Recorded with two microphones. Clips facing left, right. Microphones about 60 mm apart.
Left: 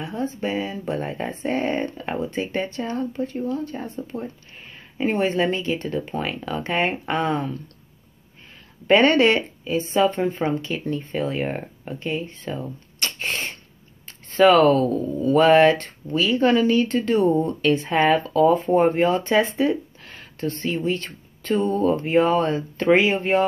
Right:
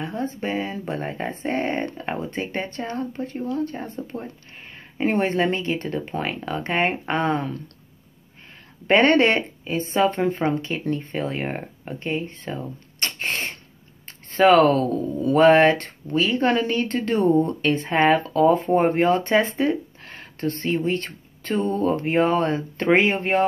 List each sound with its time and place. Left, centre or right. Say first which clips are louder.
0.0 s speech: left 1 dB; right
8.8 s speech: left 1 dB; right
12.0 s speech: even; right
13.0 s a sound: even; right
15.3 s speech: even; right